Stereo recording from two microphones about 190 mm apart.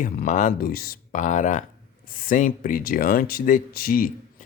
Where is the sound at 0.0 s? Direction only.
45° left (ahead or behind).